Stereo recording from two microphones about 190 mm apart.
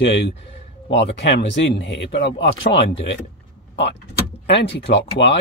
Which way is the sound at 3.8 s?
65° left (ahead or behind).